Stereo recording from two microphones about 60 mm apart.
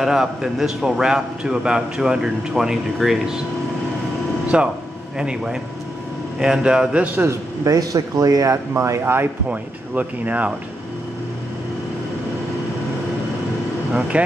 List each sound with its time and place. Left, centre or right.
0.0 s a man's voice: centre
4.5 s a man's voice: centre
7.2 s speech: right
9.0 s speech: right
9.5 s speech: right
14.1 s speech: right